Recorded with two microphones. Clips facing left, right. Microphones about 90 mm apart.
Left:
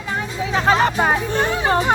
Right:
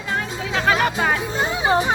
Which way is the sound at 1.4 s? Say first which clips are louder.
Left 1 dB; 10° right (ahead or behind).